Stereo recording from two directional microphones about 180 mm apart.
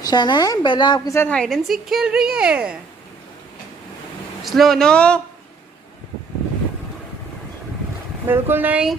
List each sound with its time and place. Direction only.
0.0 s a woman's voice: 25° left (ahead or behind)
1.1 s a woman's voice: 10° left (ahead or behind)
4.4 s a woman's voice: centre (ahead or behind)
8.3 s speech: 10° right (ahead or behind)